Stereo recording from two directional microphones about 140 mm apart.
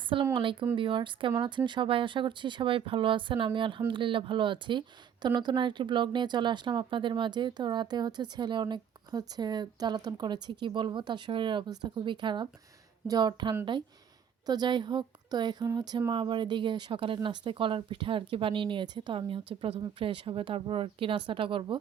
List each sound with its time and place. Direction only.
0.1 s speech: 40° right (ahead or behind)